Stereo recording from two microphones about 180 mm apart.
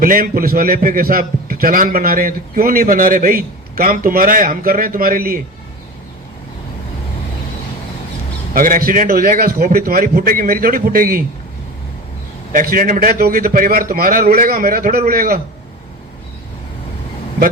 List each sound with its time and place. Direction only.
0.0 s a man's voice: 50° right (ahead or behind)
8.5 s a man's voice: 50° right (ahead or behind)
12.5 s a man's voice: 50° right (ahead or behind)